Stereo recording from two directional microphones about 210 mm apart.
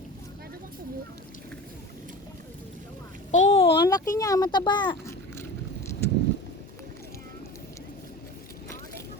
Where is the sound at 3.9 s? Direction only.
15° left (ahead or behind).